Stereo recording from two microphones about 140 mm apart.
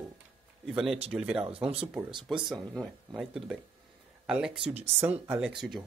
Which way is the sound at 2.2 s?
Centre (ahead or behind).